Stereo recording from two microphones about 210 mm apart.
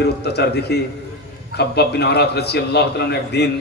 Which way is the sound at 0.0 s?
50° left (ahead or behind).